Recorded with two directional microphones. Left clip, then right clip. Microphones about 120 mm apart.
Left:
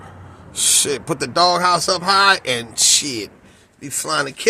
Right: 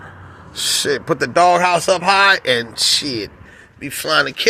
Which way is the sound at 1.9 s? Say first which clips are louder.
Right 3 dB; centre (ahead or behind).